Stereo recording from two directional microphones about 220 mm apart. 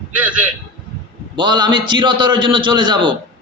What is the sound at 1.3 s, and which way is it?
A man's voice, 20° right (ahead or behind).